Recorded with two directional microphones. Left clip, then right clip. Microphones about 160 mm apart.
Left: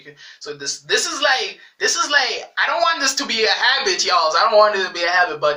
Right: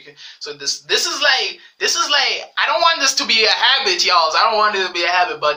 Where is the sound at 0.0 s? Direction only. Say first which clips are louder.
Right 3 dB; 10° right (ahead or behind).